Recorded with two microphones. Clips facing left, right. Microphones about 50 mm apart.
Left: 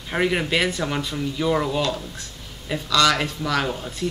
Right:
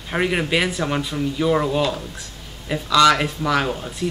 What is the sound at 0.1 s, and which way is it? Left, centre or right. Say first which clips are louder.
Speech: right 1 dB; centre.